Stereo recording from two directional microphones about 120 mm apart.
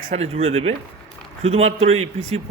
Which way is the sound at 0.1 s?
60° right (ahead or behind).